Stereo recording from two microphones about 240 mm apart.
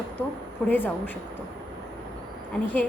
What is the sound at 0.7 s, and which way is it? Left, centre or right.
Speech, centre.